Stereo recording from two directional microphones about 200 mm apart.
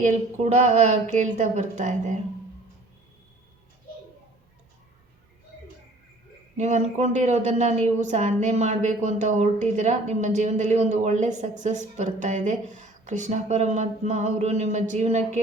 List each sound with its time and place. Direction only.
0.0 s a woman's voice: 35° right (ahead or behind)
6.6 s a woman's voice: 35° right (ahead or behind)